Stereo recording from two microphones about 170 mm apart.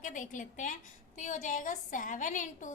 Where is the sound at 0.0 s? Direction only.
50° left (ahead or behind).